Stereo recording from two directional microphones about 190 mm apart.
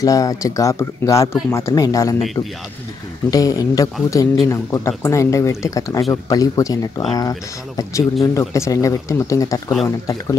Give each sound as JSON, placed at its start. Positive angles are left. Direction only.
{"t": 0.0, "sound": "speech", "side_deg": 20}
{"t": 3.3, "sound": "speech", "side_deg": 20}